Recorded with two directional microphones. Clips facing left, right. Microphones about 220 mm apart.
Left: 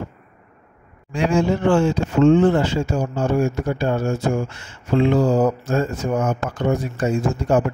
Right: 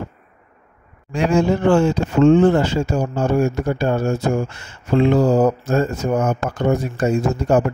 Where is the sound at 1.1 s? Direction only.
45° right (ahead or behind).